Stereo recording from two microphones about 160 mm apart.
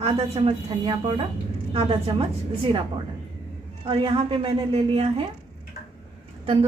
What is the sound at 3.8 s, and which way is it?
A woman's voice, 35° right (ahead or behind).